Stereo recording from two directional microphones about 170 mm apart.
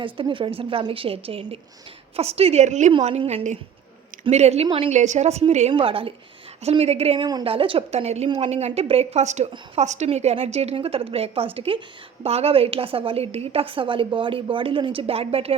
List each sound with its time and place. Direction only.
0.0 s a woman's voice: 30° right (ahead or behind)